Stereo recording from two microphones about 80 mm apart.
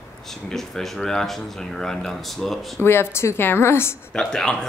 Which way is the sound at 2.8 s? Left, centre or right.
Left.